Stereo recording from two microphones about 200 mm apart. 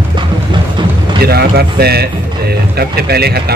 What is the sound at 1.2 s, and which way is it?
A man's voice, 50° right (ahead or behind).